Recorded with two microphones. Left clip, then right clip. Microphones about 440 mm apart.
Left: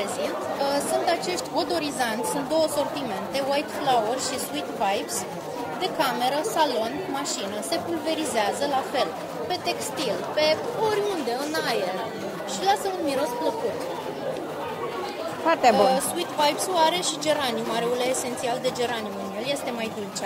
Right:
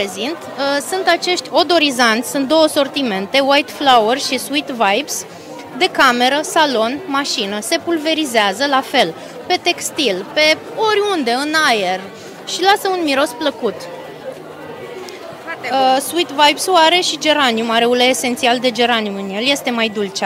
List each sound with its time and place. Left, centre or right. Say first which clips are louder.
0.6 s a woman's voice: right 7 dB; right
15.7 s a woman's voice: right 7 dB; right